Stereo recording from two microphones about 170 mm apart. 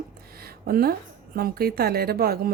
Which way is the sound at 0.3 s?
65° right (ahead or behind).